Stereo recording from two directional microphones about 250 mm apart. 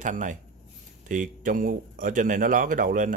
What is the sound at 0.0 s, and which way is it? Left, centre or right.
Speech, right.